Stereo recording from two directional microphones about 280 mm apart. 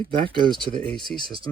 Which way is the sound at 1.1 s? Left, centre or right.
Centre.